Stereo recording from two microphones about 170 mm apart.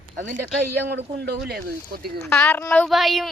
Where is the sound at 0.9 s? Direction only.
70° right (ahead or behind).